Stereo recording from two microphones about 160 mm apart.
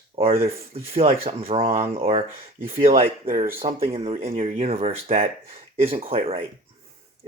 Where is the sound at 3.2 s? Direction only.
55° right (ahead or behind).